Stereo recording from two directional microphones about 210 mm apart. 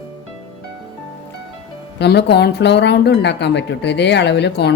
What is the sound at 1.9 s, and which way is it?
Speech, 50° left (ahead or behind).